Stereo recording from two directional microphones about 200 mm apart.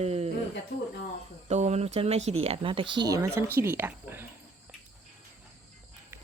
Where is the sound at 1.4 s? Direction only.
35° right (ahead or behind); by 4.2 s 10° right (ahead or behind).